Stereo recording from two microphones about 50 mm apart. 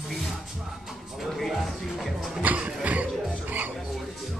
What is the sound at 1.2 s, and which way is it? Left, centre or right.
Music, centre.